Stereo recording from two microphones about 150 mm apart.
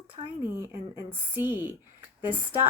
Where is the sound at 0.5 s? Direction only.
15° right (ahead or behind).